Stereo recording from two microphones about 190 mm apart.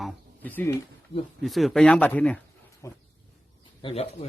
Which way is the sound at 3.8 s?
30° left (ahead or behind).